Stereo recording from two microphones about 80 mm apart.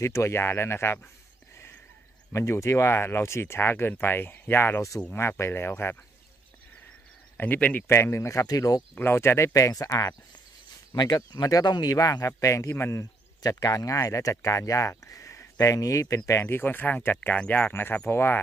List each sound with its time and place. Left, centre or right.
0.0 s speech: left
2.3 s speech: left
7.3 s speech: left
7.9 s speech: left
8.5 s speech: left
8.9 s speech: left
9.5 s speech: left
11.0 s speech: left
13.0 s speech: left